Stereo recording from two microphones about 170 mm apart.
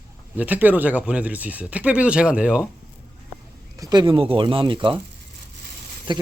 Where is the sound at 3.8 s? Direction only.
25° right (ahead or behind).